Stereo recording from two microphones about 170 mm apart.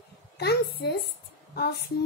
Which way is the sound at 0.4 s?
75° left (ahead or behind).